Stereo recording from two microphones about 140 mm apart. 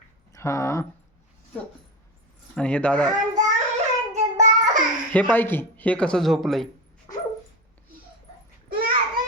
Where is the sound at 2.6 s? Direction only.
10° left (ahead or behind).